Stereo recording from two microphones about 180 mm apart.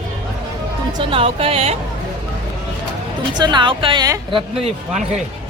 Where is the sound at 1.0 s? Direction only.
30° right (ahead or behind).